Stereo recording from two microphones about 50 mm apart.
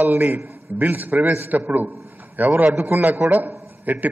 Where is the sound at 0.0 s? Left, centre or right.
Right.